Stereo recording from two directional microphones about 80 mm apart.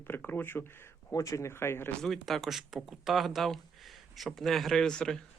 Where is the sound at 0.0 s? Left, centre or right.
Left.